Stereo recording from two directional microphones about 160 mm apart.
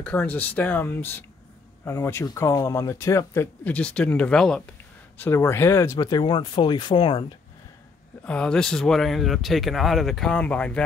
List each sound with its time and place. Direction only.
0.0 s speech: 10° left (ahead or behind); by 7.2 s 30° left (ahead or behind)
8.2 s speech: 5° left (ahead or behind)